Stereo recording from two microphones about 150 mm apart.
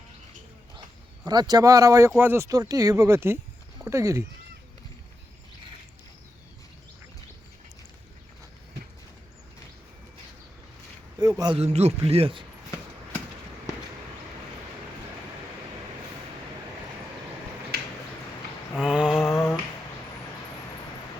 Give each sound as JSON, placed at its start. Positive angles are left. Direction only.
{"t": 1.2, "sound": "speech", "side_deg": -25}
{"t": 11.2, "sound": "speech", "side_deg": -25}
{"t": 11.5, "sound": "speech", "side_deg": -45}
{"t": 17.7, "sound": "finger snapping", "side_deg": -90}
{"t": 18.8, "sound": "mantra", "side_deg": -5}
{"t": 19.2, "sound": "a sound", "side_deg": 15}